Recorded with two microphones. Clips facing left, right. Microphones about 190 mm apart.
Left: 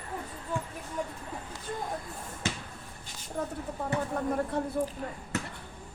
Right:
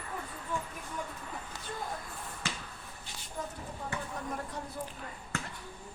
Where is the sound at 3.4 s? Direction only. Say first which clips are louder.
Left 6 dB; 60° left (ahead or behind).